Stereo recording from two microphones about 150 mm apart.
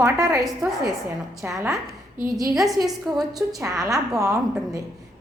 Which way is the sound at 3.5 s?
20° right (ahead or behind).